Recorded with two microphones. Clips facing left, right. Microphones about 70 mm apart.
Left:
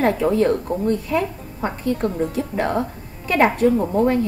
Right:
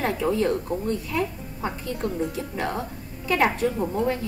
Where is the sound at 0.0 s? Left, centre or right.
Left.